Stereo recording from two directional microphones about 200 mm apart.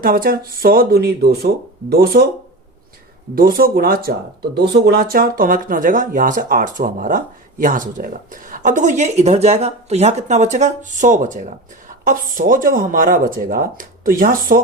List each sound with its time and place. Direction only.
0.0 s speech: 45° right (ahead or behind)
3.3 s speech: 45° right (ahead or behind)